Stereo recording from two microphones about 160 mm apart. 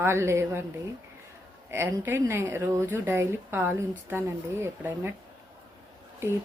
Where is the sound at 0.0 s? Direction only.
15° right (ahead or behind).